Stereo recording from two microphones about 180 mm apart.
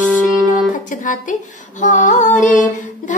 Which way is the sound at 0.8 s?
45° left (ahead or behind).